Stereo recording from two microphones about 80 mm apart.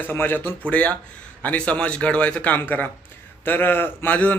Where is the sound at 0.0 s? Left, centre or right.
Left.